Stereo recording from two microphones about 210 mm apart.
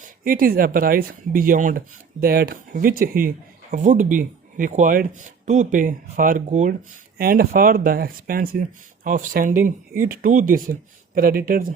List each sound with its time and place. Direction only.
0.3 s speech: 45° right (ahead or behind)